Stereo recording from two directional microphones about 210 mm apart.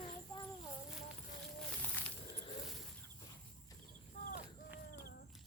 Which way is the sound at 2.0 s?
10° left (ahead or behind).